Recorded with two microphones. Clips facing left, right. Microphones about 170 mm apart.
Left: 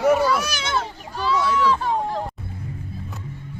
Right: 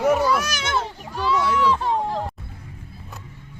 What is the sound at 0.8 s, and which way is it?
Children playing, 15° right (ahead or behind).